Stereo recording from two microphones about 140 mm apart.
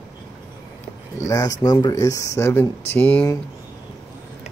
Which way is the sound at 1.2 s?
25° left (ahead or behind).